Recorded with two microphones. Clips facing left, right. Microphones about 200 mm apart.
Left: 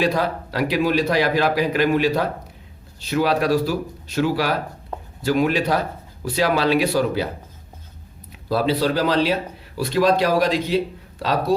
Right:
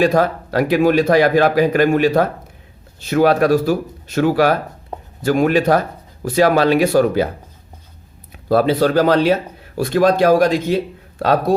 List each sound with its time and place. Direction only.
0.0 s speech: 50° right (ahead or behind)
8.4 s speech: 50° right (ahead or behind)